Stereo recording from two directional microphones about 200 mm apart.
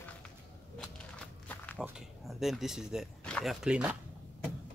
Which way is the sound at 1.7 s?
5° right (ahead or behind).